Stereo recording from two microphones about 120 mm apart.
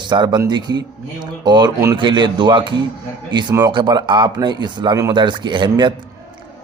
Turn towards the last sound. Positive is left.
turn(degrees=-40)  # may be behind; listen again after turning